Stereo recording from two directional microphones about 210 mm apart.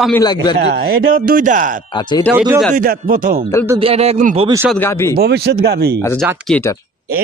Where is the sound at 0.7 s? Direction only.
45° right (ahead or behind).